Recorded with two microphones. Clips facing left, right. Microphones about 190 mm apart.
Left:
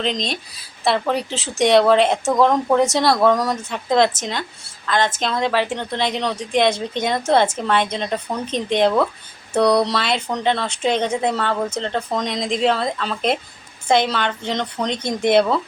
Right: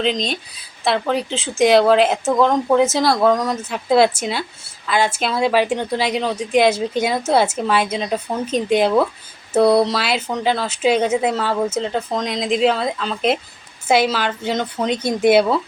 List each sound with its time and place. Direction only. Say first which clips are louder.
0.0 s a woman's voice: right 3 dB; centre (ahead or behind)